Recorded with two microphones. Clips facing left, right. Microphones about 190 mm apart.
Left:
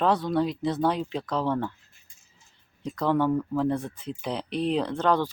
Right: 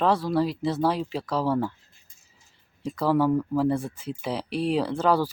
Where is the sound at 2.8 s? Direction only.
5° right (ahead or behind).